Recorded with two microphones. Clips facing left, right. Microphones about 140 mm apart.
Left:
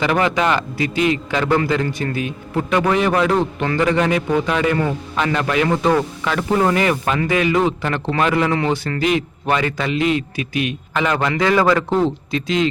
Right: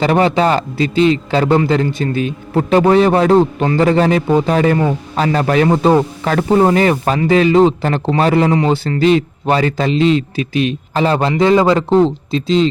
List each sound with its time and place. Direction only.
0.0 s a man's voice: 30° right (ahead or behind)